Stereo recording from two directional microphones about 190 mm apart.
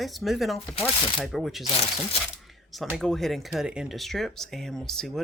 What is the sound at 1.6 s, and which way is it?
Speech, 30° left (ahead or behind).